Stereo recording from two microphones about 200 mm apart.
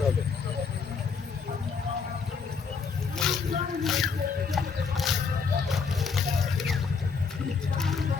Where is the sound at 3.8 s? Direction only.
Centre (ahead or behind).